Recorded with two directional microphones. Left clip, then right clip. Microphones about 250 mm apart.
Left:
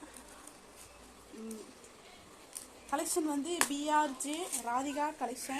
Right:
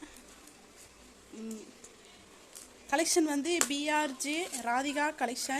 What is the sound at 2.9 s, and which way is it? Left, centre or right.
Speech, right.